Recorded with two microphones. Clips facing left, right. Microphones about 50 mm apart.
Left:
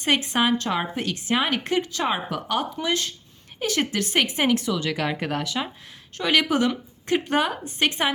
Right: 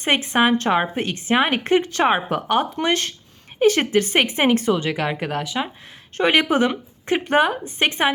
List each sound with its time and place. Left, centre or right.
0.0 s a woman's voice: right
2.8 s speech: right
3.6 s a woman's voice: right
4.9 s speech: centre
6.1 s a woman's voice: right